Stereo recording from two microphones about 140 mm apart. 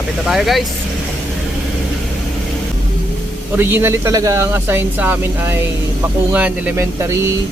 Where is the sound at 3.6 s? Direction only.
15° right (ahead or behind).